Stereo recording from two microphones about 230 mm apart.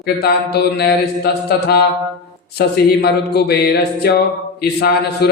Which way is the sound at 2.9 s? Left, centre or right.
Left.